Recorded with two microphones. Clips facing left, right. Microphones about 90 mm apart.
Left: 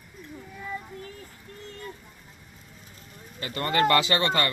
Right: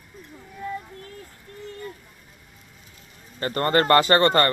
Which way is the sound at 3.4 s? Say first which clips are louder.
Right 3 dB; 45° right (ahead or behind).